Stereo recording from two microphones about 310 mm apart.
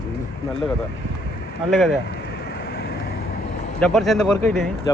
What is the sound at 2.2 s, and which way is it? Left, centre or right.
Vehicle, left.